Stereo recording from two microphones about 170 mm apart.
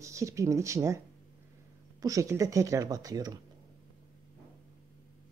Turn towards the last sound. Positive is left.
turn(degrees=-20)  # may be behind; listen again after turning